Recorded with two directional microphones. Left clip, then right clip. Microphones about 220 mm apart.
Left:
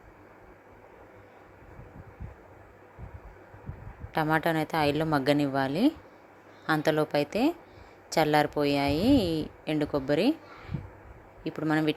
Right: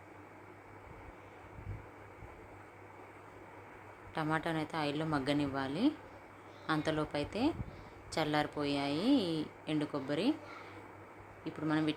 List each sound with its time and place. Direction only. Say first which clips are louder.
4.1 s speech: left 9 dB; 30° left (ahead or behind)
11.4 s speech: left 7 dB; 30° left (ahead or behind)